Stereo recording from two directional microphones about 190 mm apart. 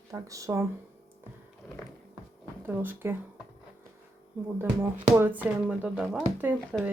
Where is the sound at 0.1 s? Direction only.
15° right (ahead or behind).